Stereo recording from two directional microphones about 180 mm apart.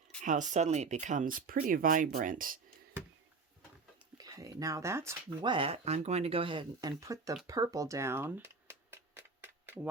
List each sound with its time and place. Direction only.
0.2 s speech: 45° right (ahead or behind)
4.2 s speech: 20° right (ahead or behind)
7.4 s a sound: 20° right (ahead or behind)